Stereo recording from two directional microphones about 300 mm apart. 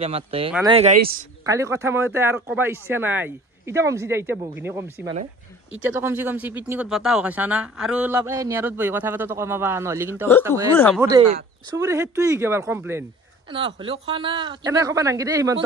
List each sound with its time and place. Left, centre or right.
0.0 s speech: centre
1.4 s speech: centre